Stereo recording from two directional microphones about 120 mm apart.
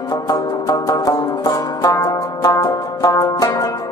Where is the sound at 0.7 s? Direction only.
30° left (ahead or behind).